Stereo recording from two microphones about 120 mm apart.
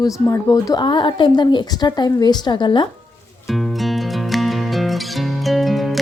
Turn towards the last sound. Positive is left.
turn(degrees=0)  # may be behind; listen again after turning